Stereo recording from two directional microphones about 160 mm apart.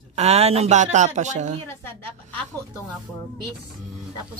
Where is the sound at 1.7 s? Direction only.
15° left (ahead or behind).